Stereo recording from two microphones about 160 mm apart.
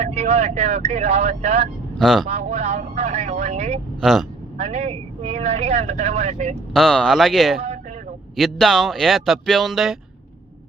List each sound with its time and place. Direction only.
0.0 s speech: 40° right (ahead or behind)
2.0 s speech: centre (ahead or behind)
2.2 s speech: 45° right (ahead or behind)
4.0 s speech: centre (ahead or behind)
4.5 s speech: 40° right (ahead or behind)
6.7 s speech: 5° left (ahead or behind)